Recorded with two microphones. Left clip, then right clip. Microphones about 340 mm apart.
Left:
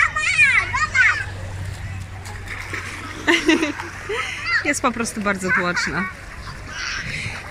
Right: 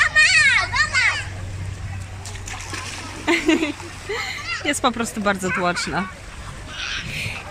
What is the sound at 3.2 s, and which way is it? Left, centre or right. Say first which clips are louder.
Speech: left 2 dB; centre.